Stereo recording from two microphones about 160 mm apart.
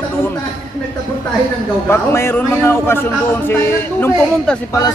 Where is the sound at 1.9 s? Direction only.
15° left (ahead or behind).